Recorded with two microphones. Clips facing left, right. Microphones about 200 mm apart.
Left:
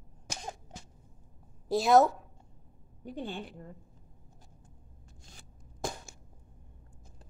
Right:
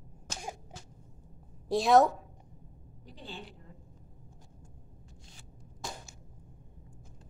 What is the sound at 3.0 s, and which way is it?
Speech, 55° left (ahead or behind).